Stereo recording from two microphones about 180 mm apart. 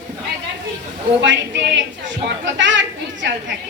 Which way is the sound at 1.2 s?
90° right.